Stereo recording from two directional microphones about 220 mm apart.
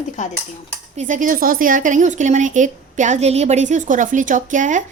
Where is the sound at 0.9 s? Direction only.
35° right (ahead or behind).